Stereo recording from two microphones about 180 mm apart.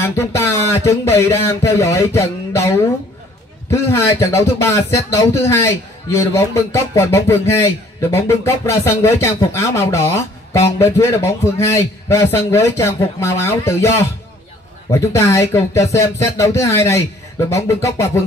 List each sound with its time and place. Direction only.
0.0 s a man's voice: 15° left (ahead or behind)